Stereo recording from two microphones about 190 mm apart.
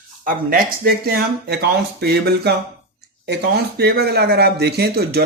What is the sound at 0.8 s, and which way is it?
Speech, 55° right (ahead or behind).